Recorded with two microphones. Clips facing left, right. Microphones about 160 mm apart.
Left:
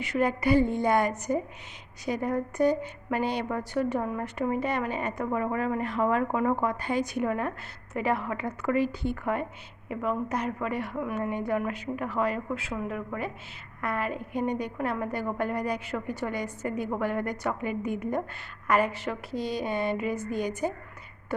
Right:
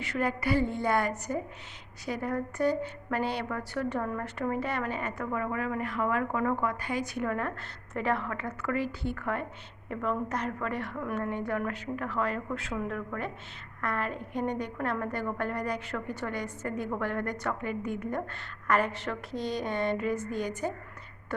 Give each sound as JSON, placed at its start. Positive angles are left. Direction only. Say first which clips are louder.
{"t": 0.0, "sound": "a woman's voice", "louder": "left 4 dB", "side_deg": 15}